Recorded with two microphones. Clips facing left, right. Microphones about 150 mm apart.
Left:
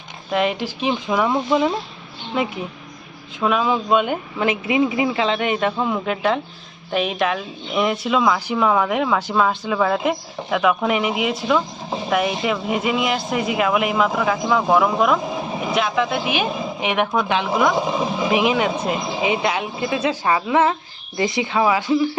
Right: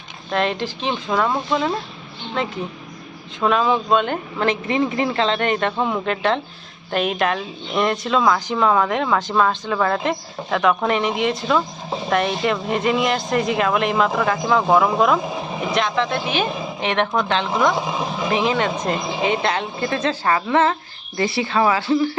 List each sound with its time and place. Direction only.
0.3 s speech: 10° left (ahead or behind)